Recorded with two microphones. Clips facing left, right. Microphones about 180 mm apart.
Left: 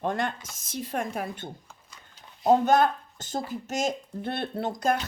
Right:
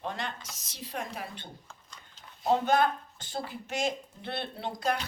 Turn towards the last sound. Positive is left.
turn(degrees=45)  # may be behind; listen again after turning